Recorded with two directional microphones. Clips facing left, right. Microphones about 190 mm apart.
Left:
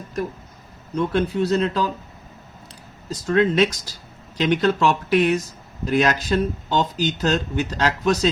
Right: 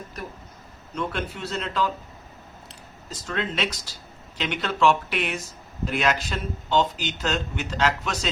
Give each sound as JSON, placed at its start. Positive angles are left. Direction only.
{"t": 0.9, "sound": "speech", "side_deg": 35}
{"t": 3.2, "sound": "speech", "side_deg": 45}